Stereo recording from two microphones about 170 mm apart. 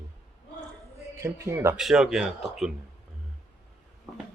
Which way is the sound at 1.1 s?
15° right (ahead or behind).